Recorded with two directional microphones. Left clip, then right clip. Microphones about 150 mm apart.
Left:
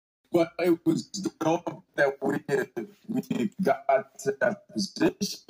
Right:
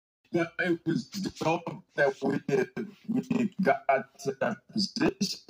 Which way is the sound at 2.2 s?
25° right (ahead or behind).